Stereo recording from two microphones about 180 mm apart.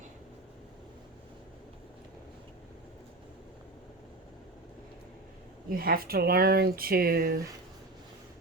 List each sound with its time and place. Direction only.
5.7 s speech: 55° right (ahead or behind)